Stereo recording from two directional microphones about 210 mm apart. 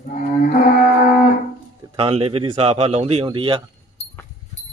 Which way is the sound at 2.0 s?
25° right (ahead or behind).